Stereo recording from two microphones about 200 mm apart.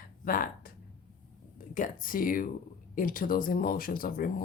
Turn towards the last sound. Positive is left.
turn(degrees=45)  # may be behind; listen again after turning